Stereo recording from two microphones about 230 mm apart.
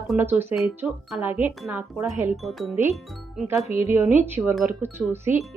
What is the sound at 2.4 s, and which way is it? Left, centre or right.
Speech, centre.